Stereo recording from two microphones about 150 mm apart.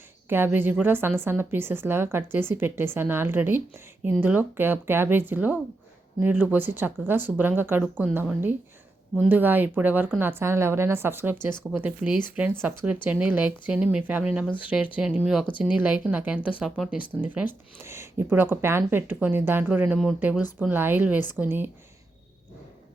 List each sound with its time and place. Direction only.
0.3 s speech: 15° right (ahead or behind)